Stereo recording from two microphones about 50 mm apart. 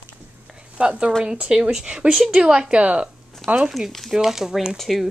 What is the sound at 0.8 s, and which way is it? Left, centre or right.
Speech, right.